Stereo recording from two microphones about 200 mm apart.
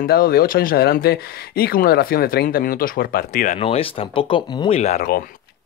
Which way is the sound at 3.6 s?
30° left (ahead or behind).